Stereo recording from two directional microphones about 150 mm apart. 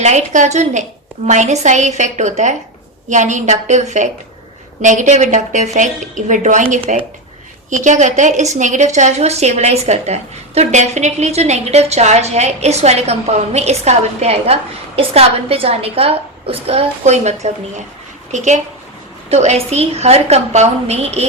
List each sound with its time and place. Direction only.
0.0 s a woman's voice: 50° right (ahead or behind)